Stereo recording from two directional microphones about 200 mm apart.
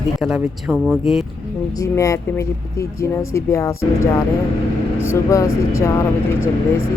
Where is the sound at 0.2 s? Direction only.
5° right (ahead or behind).